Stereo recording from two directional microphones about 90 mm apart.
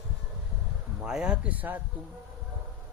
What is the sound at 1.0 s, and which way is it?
Speech, 10° right (ahead or behind).